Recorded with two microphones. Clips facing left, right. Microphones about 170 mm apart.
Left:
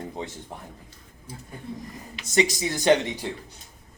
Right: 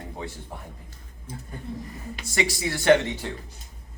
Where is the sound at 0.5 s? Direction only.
20° left (ahead or behind).